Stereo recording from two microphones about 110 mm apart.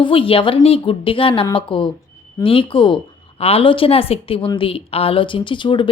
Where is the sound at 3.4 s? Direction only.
60° left (ahead or behind).